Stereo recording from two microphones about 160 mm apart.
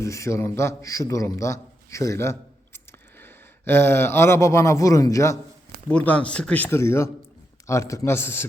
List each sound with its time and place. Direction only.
0.0 s a man's voice: 20° left (ahead or behind)
5.9 s speech: 5° left (ahead or behind)